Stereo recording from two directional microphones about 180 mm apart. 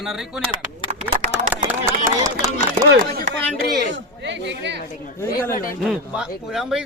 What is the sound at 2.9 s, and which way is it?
Speech, 70° right (ahead or behind).